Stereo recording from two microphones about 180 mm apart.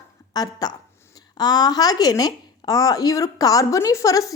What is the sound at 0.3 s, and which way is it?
A woman's voice, 20° left (ahead or behind).